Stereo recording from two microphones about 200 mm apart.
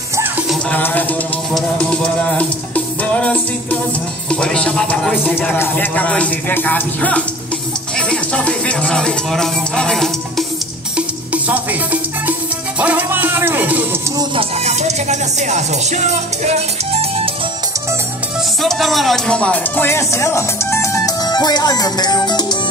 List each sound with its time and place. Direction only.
0.5 s music: 5° left (ahead or behind)
1.5 s speech: 5° left (ahead or behind)
11.0 s music: 5° right (ahead or behind)
14.1 s speech: 30° right (ahead or behind)
18.6 s speech: centre (ahead or behind); by 22.6 s 20° left (ahead or behind)